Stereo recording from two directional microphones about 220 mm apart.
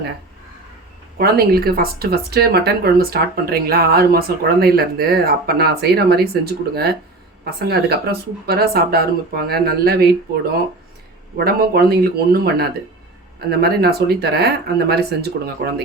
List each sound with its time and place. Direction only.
1.2 s speech: 45° right (ahead or behind)
11.3 s speech: 45° right (ahead or behind)